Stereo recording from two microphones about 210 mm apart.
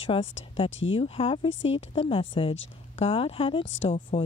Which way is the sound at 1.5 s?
65° left (ahead or behind).